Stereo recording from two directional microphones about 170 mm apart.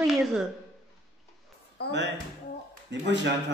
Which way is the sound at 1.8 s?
70° left (ahead or behind).